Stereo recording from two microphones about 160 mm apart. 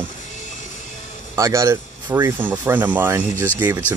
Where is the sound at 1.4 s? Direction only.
20° right (ahead or behind).